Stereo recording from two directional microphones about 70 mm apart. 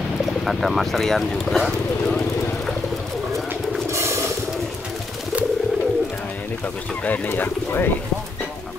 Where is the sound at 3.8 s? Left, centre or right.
Right.